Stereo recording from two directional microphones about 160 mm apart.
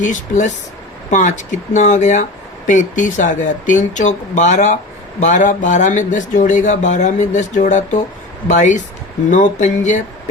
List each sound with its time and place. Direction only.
0.0 s speech: 50° left (ahead or behind)